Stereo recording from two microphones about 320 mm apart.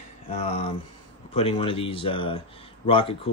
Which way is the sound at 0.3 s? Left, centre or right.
Centre.